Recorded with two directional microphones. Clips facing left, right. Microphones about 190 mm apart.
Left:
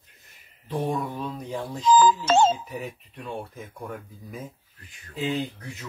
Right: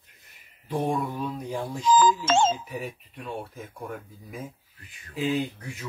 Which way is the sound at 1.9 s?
40° left (ahead or behind).